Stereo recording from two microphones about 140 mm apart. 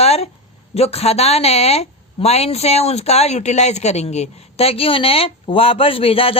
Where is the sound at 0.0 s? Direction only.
50° left (ahead or behind).